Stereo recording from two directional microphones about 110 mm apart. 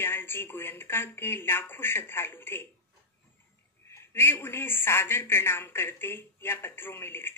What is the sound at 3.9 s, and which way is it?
A man's voice, 20° left (ahead or behind).